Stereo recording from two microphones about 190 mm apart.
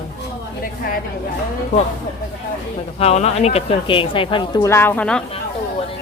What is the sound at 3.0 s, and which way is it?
Speech, 35° left (ahead or behind).